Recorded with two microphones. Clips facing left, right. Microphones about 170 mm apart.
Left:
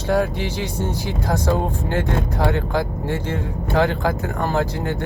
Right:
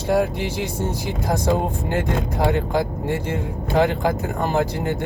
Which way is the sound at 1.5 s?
15° right (ahead or behind).